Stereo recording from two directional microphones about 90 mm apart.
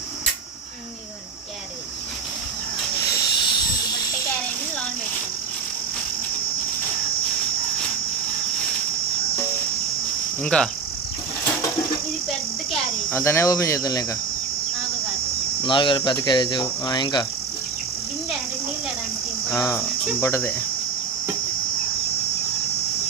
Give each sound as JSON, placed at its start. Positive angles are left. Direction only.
{"t": 3.3, "sound": "a sound", "side_deg": 60}
{"t": 10.4, "sound": "speech", "side_deg": 10}
{"t": 13.1, "sound": "speech", "side_deg": 30}
{"t": 15.6, "sound": "speech", "side_deg": 65}
{"t": 19.5, "sound": "speech", "side_deg": 35}
{"t": 20.1, "sound": "speech", "side_deg": 25}